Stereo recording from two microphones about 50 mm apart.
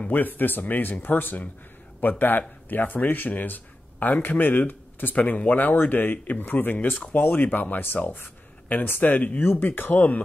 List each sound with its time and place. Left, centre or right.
0.1 s speech: left